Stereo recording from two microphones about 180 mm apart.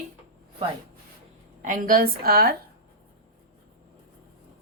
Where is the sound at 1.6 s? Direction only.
50° right (ahead or behind).